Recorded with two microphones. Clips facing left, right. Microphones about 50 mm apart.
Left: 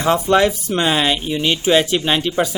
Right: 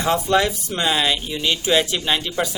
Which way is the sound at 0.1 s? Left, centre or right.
Left.